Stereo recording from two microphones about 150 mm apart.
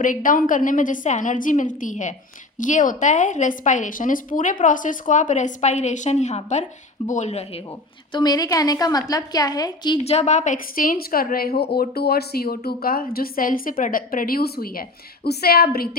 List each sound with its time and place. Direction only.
0.0 s a woman's voice: 65° left (ahead or behind); by 7.6 s 45° left (ahead or behind)
8.1 s a woman's voice: 25° left (ahead or behind)
10.0 s a woman's voice: 45° left (ahead or behind); by 15.9 s 90° left